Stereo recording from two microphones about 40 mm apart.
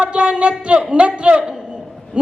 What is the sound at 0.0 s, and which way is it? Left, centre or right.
A woman's voice, right.